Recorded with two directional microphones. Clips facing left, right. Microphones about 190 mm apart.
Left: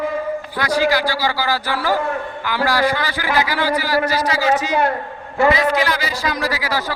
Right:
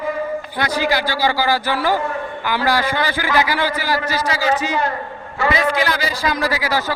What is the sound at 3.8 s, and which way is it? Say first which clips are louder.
Speech: left 3 dB; 40° left (ahead or behind).